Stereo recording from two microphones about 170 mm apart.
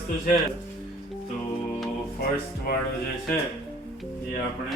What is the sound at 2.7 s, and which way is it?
Speech, 60° left (ahead or behind).